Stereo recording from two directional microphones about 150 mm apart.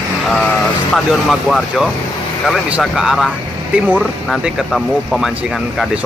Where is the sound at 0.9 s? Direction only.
Centre (ahead or behind).